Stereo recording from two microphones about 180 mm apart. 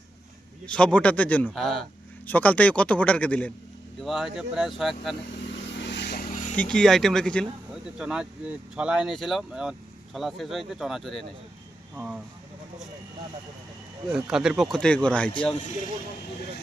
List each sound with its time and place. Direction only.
0.6 s speech: 5° left (ahead or behind)
5.7 s vehicle: 75° left (ahead or behind); by 6.6 s 45° left (ahead or behind)
6.6 s speech: 5° left (ahead or behind)
14.1 s speech: 5° right (ahead or behind)